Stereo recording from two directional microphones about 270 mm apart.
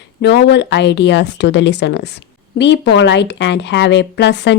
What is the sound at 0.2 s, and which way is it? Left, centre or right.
A woman's voice, left.